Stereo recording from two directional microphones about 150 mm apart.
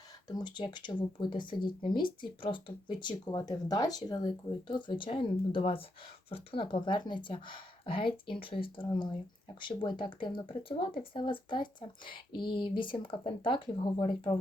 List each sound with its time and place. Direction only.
0.3 s speech: 30° left (ahead or behind)